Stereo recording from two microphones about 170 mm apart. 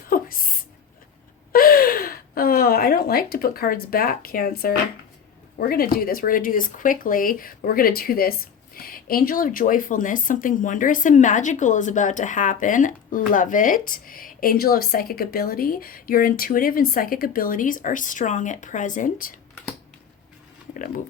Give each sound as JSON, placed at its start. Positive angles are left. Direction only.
{"t": 0.1, "sound": "a sound", "side_deg": 55}
{"t": 1.5, "sound": "speech", "side_deg": 60}
{"t": 20.7, "sound": "speech", "side_deg": 50}